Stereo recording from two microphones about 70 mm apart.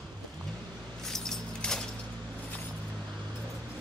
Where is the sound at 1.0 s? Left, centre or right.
Centre.